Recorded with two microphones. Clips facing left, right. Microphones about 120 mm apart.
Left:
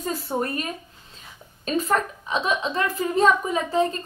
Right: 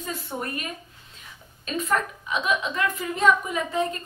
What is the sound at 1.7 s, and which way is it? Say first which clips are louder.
A woman's voice: left 3 dB; 35° left (ahead or behind).